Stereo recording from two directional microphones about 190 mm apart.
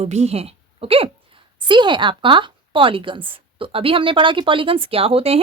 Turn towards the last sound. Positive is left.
turn(degrees=-30)  # may be behind; listen again after turning